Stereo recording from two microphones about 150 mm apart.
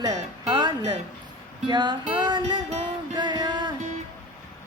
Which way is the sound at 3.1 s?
30° right (ahead or behind).